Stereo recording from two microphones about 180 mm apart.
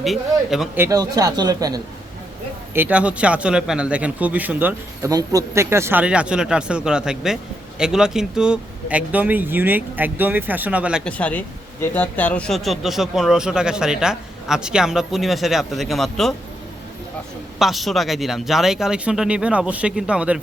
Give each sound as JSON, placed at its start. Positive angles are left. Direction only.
{"t": 0.0, "sound": "speech", "side_deg": 0}
{"t": 0.8, "sound": "speech", "side_deg": -20}
{"t": 2.7, "sound": "speech", "side_deg": -10}
{"t": 11.0, "sound": "speech", "side_deg": 10}
{"t": 17.6, "sound": "speech", "side_deg": 0}